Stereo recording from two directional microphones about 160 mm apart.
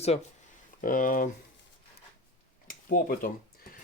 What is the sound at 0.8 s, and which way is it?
Speech, 60° left (ahead or behind).